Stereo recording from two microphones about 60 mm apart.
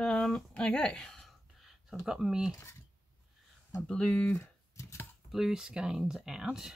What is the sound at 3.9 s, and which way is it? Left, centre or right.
Speech, centre.